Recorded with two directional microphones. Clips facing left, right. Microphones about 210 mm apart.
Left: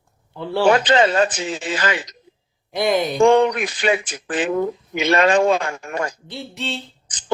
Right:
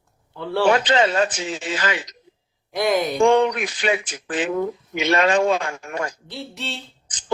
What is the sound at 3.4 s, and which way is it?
Speech, 55° left (ahead or behind).